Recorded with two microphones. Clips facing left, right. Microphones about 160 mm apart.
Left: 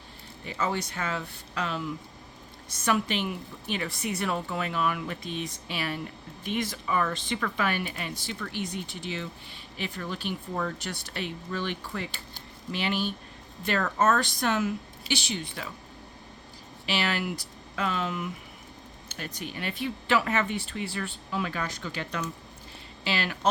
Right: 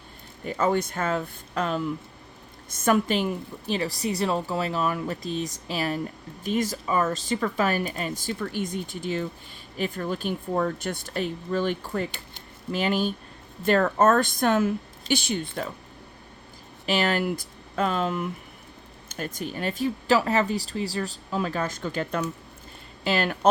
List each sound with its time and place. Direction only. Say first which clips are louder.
0.4 s a woman's voice: right 6 dB; 50° right (ahead or behind)
16.8 s a woman's voice: right 5 dB; 45° right (ahead or behind)